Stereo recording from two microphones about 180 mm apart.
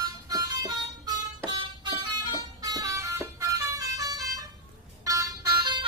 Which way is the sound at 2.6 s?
20° right (ahead or behind).